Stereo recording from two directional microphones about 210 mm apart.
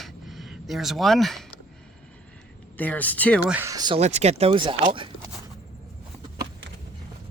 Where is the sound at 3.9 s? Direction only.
30° right (ahead or behind).